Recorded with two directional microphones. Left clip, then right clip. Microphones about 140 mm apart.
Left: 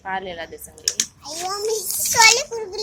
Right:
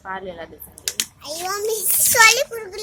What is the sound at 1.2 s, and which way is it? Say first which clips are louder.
A child's voice: right 1 dB; 25° right (ahead or behind).